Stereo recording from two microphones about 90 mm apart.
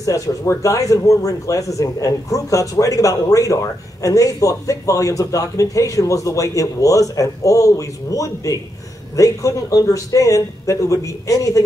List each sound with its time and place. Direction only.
0.0 s speech: 35° left (ahead or behind)